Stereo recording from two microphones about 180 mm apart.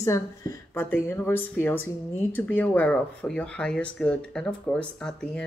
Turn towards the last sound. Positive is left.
turn(degrees=5)  # may be behind; listen again after turning